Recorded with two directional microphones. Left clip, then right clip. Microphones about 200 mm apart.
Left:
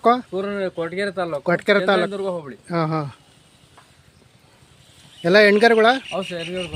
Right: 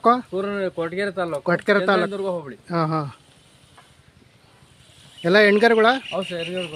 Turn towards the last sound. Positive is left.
turn(degrees=15)  # may be behind; listen again after turning